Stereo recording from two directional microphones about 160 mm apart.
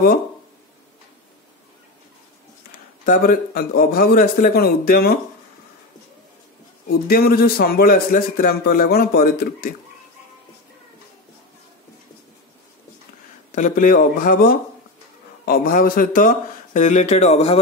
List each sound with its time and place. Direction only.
3.1 s speech: 60° left (ahead or behind)
6.9 s speech: 70° left (ahead or behind)
13.6 s speech: 55° left (ahead or behind)